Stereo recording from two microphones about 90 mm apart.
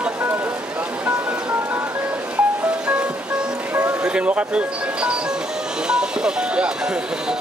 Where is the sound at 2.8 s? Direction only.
15° right (ahead or behind).